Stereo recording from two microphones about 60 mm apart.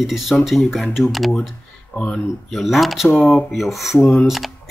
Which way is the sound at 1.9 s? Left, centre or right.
Centre.